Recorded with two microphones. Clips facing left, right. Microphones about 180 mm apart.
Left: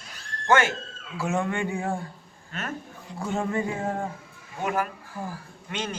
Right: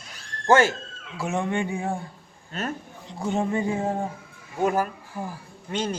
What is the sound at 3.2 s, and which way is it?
Speech, 20° right (ahead or behind).